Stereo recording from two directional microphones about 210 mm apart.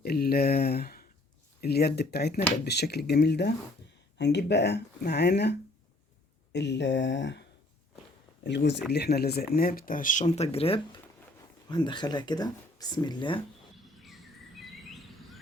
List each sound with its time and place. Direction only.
0.0 s speech: 45° left (ahead or behind)
8.4 s speech: 55° left (ahead or behind); by 13.4 s 20° left (ahead or behind)
14.6 s a sound: centre (ahead or behind)